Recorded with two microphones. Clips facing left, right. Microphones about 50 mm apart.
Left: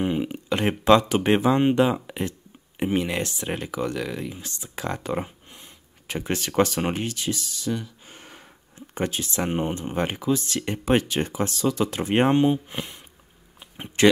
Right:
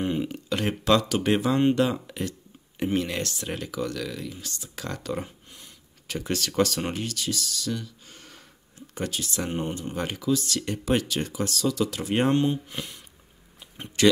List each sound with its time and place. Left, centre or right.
0.0 s speech: centre